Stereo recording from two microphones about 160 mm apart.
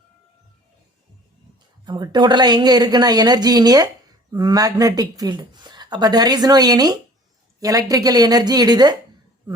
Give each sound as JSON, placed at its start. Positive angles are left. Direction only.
{"t": 1.8, "sound": "speech", "side_deg": -30}